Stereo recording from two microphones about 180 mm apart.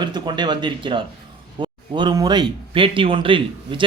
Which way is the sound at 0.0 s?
25° right (ahead or behind).